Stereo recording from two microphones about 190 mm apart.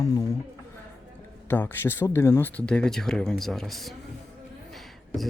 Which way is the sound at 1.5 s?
10° left (ahead or behind).